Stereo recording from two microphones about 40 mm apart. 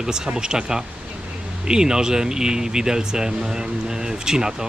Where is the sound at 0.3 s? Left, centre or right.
Centre.